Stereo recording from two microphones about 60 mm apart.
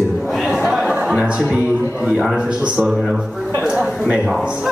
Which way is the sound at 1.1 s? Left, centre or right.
Right.